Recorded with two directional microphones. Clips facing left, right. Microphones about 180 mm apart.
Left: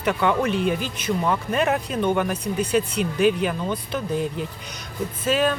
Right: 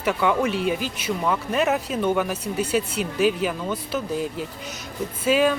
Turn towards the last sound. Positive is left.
turn(degrees=-10)  # may be behind; listen again after turning